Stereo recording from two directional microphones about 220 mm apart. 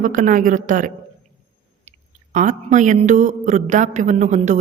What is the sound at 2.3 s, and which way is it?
Speech, 35° right (ahead or behind).